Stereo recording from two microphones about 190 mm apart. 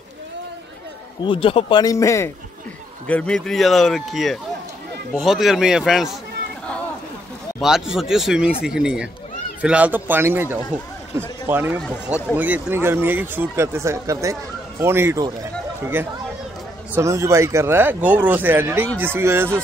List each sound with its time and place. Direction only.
1.2 s speech: 25° left (ahead or behind); by 6.1 s centre (ahead or behind)
7.6 s speech: 5° right (ahead or behind)
11.8 s speech: 5° left (ahead or behind)
12.4 s speech: 10° right (ahead or behind)